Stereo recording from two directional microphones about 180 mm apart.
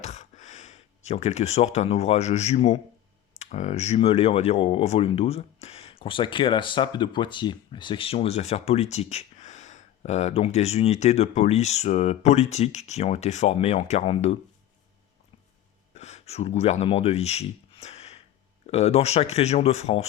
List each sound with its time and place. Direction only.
0.0 s speech: 40° left (ahead or behind)
16.0 s speech: 40° left (ahead or behind)